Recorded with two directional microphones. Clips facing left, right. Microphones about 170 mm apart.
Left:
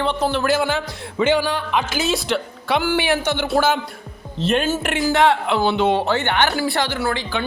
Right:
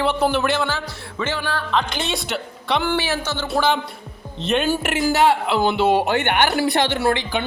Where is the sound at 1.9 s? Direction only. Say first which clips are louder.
Left 4 dB; centre (ahead or behind).